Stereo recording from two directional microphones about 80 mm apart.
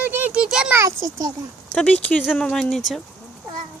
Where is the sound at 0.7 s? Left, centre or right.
Right.